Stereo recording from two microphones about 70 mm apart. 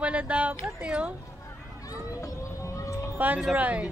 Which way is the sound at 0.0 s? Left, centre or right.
Centre.